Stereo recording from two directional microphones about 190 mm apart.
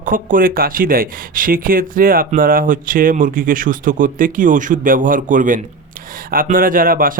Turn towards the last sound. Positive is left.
turn(degrees=-50)  # may be behind; listen again after turning